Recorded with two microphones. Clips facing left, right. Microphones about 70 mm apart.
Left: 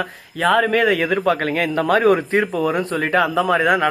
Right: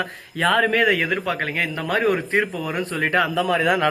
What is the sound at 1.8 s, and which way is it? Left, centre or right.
Speech, left.